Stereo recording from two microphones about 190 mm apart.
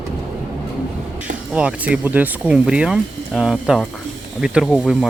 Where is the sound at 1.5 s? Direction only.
5° right (ahead or behind).